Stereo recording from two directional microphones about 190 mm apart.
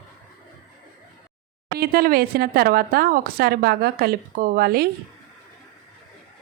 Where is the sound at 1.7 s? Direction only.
50° right (ahead or behind).